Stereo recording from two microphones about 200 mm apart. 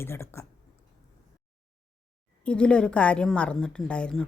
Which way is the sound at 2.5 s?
5° left (ahead or behind).